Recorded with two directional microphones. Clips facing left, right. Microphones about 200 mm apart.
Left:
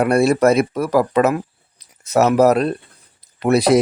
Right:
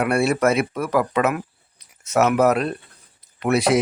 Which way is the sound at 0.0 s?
35° left (ahead or behind).